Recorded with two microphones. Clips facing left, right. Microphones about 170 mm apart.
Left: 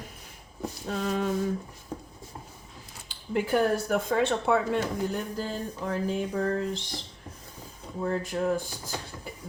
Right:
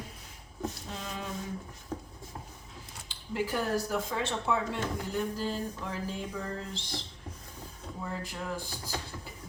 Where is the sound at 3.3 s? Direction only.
60° left (ahead or behind).